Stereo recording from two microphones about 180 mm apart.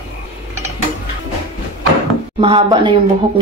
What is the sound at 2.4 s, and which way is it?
Speech, 30° right (ahead or behind).